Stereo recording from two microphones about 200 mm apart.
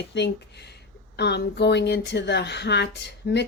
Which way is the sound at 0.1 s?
60° left (ahead or behind).